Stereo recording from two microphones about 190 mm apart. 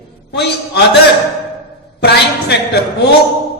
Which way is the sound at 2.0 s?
60° left (ahead or behind).